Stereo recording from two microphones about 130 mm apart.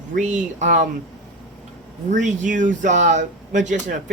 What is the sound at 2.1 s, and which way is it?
Speech, 75° right (ahead or behind).